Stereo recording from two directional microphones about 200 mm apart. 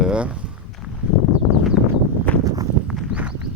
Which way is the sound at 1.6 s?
Centre (ahead or behind).